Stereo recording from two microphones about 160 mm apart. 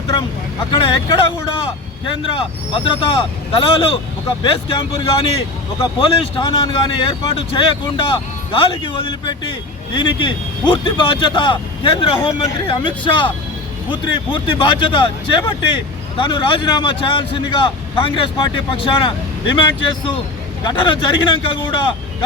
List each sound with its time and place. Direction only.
0.7 s speech: 35° left (ahead or behind)